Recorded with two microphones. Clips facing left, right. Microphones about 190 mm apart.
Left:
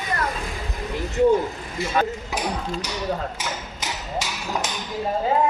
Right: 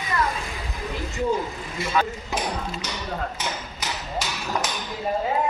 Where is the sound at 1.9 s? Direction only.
45° left (ahead or behind).